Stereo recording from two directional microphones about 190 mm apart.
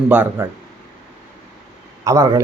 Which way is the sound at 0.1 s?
10° right (ahead or behind).